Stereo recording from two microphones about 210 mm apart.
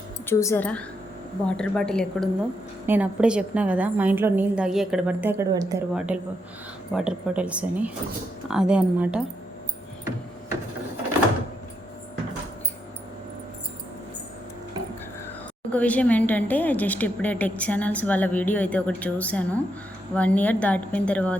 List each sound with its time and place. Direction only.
0.3 s speech: 10° left (ahead or behind)
2.8 s a woman's voice: 10° right (ahead or behind)
5.9 s speech: 5° right (ahead or behind)
15.7 s speech: 5° left (ahead or behind)